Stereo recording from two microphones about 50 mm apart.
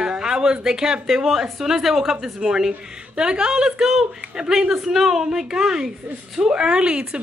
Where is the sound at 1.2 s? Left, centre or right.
Centre.